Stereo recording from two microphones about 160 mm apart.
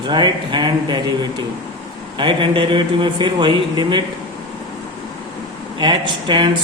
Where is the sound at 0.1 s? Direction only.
30° right (ahead or behind).